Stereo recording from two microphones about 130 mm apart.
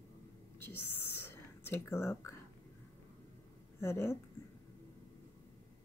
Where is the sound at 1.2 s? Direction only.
20° left (ahead or behind).